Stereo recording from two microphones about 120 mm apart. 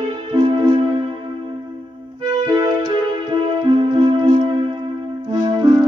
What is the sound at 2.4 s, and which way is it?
Music, 40° right (ahead or behind).